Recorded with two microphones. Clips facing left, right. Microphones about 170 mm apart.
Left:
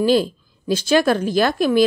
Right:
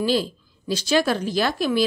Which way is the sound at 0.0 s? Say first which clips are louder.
Left 6 dB; 50° left (ahead or behind).